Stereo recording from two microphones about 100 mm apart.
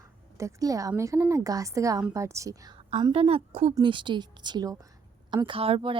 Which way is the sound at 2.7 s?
45° right (ahead or behind).